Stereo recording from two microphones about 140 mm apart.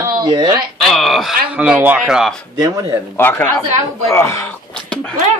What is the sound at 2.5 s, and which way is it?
Speech, 25° right (ahead or behind).